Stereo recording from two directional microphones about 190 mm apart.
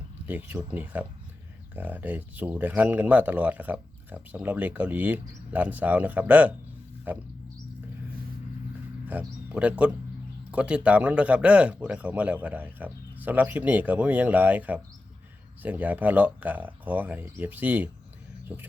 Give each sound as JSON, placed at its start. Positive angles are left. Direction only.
{"t": 0.3, "sound": "speech", "side_deg": -10}
{"t": 9.0, "sound": "speech", "side_deg": -10}